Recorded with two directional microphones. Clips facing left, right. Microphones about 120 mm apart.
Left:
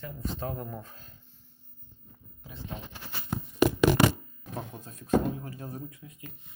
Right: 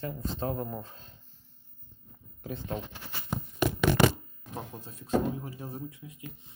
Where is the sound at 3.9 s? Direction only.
90° left.